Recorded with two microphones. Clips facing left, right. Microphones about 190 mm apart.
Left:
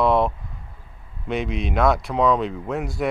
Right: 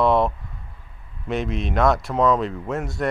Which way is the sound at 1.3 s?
Centre (ahead or behind).